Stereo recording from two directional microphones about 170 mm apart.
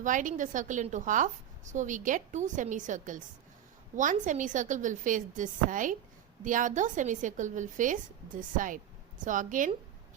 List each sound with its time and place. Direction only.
0.0 s a woman's voice: 50° right (ahead or behind)